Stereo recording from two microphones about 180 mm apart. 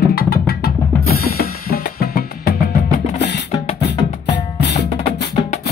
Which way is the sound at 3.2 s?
70° left (ahead or behind).